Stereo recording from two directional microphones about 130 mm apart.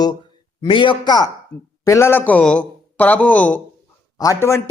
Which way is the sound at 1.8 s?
20° left (ahead or behind).